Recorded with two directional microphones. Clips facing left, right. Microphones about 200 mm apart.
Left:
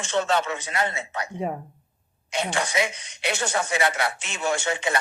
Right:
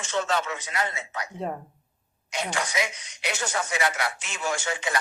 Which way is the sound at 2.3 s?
30° left (ahead or behind).